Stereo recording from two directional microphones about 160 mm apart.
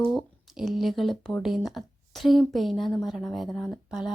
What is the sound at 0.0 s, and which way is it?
Speech, centre (ahead or behind).